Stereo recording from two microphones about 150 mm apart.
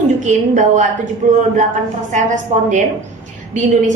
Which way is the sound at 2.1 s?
55° right (ahead or behind).